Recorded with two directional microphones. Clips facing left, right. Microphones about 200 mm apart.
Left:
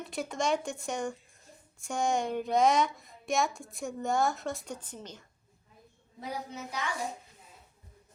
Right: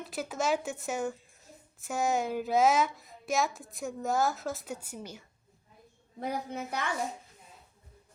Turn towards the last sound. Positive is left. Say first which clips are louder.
# right 3 dB
turn(degrees=-55)  # may be behind; listen again after turning